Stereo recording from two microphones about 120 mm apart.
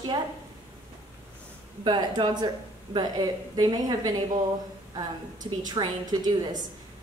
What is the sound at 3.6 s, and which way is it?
Speech, 35° right (ahead or behind).